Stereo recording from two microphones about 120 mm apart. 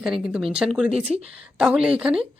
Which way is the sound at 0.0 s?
5° right (ahead or behind).